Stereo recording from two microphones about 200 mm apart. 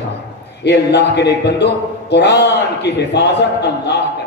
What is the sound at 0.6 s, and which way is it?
Speech, 60° left (ahead or behind).